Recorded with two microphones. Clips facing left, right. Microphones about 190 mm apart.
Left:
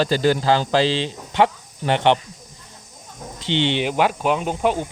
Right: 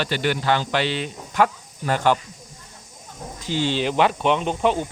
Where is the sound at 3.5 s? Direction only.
25° left (ahead or behind).